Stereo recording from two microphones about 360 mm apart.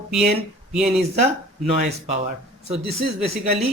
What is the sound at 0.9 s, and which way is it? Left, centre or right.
Speech, centre.